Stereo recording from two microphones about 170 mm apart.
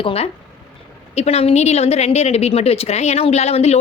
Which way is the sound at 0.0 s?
35° left (ahead or behind).